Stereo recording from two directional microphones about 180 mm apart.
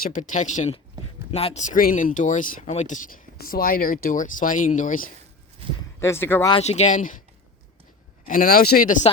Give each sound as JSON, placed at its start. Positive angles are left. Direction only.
{"t": 0.0, "sound": "speech", "side_deg": 45}
{"t": 3.3, "sound": "speech", "side_deg": 55}
{"t": 5.6, "sound": "a sound", "side_deg": -30}
{"t": 6.0, "sound": "speech", "side_deg": 15}
{"t": 6.5, "sound": "speech", "side_deg": 35}
{"t": 8.3, "sound": "speech", "side_deg": 50}